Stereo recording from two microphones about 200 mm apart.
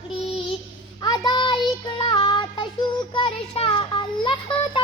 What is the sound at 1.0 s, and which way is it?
Child singing, 20° left (ahead or behind).